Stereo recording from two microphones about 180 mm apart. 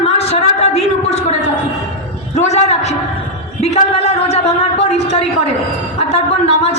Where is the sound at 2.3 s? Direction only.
40° left (ahead or behind).